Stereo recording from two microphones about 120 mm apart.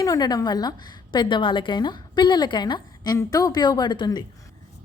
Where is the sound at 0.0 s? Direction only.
30° left (ahead or behind).